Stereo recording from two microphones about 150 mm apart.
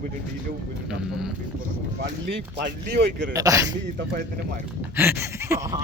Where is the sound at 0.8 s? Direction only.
5° right (ahead or behind).